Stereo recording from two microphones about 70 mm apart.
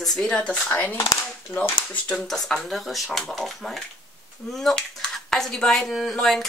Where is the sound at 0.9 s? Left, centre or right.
Left.